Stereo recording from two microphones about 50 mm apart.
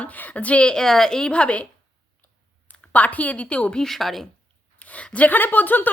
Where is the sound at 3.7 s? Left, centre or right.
Centre.